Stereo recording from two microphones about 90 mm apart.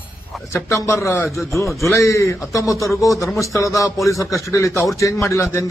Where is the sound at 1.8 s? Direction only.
35° left (ahead or behind).